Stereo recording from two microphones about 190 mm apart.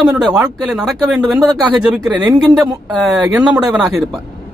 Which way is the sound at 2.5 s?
20° right (ahead or behind).